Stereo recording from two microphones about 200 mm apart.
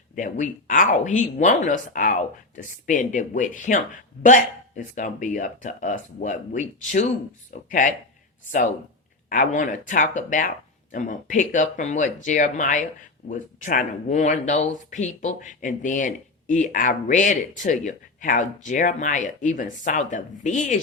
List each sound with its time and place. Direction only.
0.2 s speech: 40° left (ahead or behind)
9.3 s speech: 40° left (ahead or behind)